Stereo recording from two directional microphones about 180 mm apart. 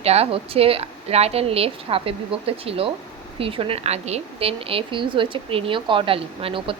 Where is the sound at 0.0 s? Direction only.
35° right (ahead or behind).